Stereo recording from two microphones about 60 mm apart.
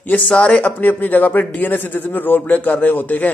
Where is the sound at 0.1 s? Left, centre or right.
Left.